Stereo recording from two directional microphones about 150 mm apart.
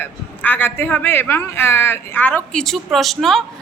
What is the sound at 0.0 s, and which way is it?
A man's voice, 10° left (ahead or behind).